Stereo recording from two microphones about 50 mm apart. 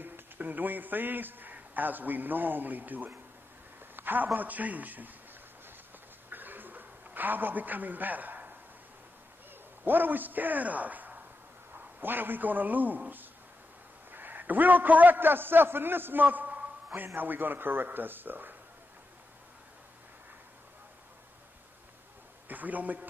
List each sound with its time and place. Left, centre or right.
0.0 s a man's voice: right
6.3 s a sound: right
9.8 s a man's voice: right
14.1 s a man's voice: right
22.5 s a man's voice: right